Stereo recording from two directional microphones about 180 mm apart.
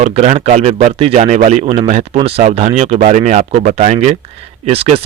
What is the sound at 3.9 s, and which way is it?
A man's voice, 35° right (ahead or behind).